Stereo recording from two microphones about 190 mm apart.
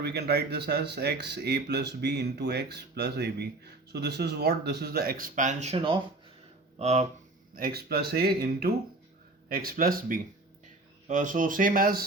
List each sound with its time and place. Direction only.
0.0 s speech: 60° right (ahead or behind); by 7.1 s 35° right (ahead or behind)
7.5 s speech: 50° right (ahead or behind)